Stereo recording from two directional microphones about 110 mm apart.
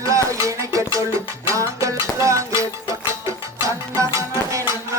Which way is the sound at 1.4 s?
30° right (ahead or behind).